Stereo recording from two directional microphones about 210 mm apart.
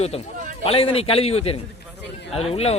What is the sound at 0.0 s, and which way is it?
A man's voice, 30° left (ahead or behind).